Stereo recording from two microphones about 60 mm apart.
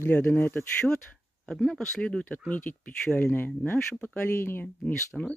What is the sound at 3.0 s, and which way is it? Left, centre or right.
Speech, centre.